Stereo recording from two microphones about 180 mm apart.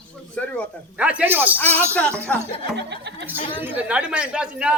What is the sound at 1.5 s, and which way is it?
Speech, 10° left (ahead or behind).